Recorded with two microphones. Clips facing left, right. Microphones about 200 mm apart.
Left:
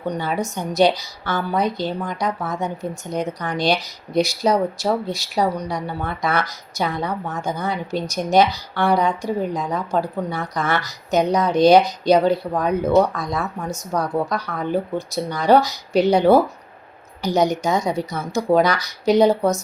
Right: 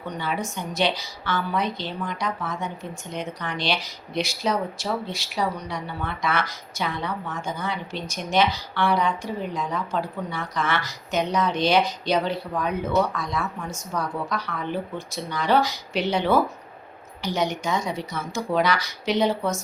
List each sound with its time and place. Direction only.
0.0 s speech: 40° left (ahead or behind)